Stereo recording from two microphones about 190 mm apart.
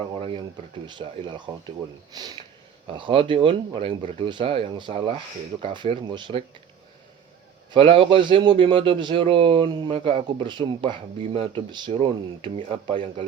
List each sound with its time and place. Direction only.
0.1 s a man's voice: 30° right (ahead or behind)
7.7 s a man's voice: 25° right (ahead or behind)